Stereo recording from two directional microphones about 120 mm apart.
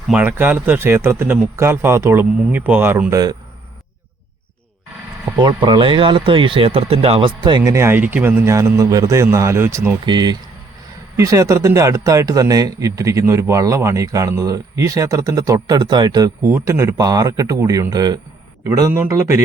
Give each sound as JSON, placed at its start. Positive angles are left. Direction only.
{"t": 0.1, "sound": "speech", "side_deg": -15}
{"t": 5.4, "sound": "speech", "side_deg": -40}
{"t": 7.6, "sound": "speech", "side_deg": -25}
{"t": 10.1, "sound": "speech", "side_deg": -35}